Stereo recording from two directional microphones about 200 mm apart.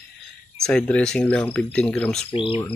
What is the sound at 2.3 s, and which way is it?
Speech, 25° left (ahead or behind).